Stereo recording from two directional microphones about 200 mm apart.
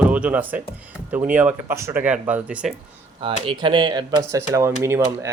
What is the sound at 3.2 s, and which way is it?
Speech, 25° right (ahead or behind).